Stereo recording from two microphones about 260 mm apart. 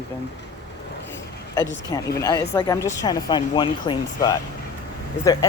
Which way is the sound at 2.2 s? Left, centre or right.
Centre.